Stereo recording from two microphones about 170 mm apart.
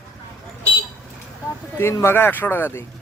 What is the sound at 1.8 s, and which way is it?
Speech, 15° left (ahead or behind).